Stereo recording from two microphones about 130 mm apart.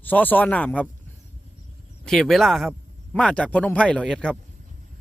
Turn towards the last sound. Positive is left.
turn(degrees=5)  # may be behind; listen again after turning